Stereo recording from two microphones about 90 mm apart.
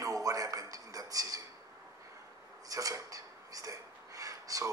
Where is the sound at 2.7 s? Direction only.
40° right (ahead or behind).